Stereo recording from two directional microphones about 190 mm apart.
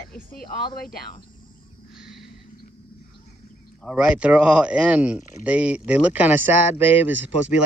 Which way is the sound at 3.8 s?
5° right (ahead or behind).